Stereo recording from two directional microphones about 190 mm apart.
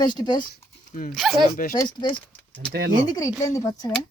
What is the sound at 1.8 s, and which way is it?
Speech, 25° left (ahead or behind).